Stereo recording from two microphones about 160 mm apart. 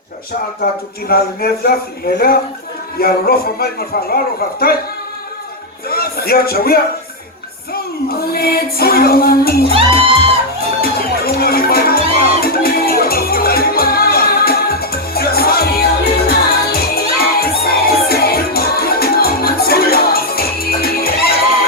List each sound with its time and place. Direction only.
0.6 s speech: 70° left (ahead or behind)
5.9 s speech: 70° left (ahead or behind)
8.2 s speech: 75° left (ahead or behind)
10.8 s music: 75° left (ahead or behind)
16.7 s crowd: 70° left (ahead or behind)